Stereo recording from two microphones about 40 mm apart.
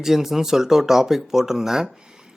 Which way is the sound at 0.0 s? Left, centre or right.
Centre.